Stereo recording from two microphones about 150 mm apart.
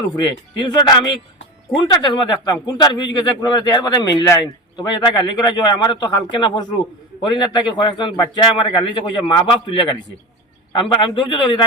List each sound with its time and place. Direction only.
0.2 s a man's voice: 30° left (ahead or behind)